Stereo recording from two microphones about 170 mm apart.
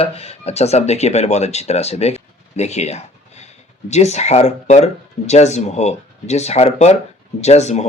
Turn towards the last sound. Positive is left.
turn(degrees=40)  # may be behind; listen again after turning